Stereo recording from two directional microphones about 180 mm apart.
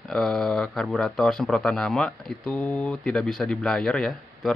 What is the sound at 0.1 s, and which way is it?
A man's voice, 5° left (ahead or behind).